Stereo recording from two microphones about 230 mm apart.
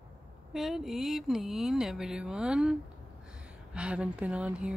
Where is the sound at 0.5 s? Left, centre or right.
Centre.